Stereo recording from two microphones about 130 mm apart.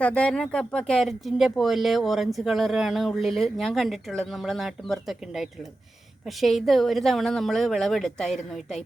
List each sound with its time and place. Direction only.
0.0 s speech: 10° left (ahead or behind)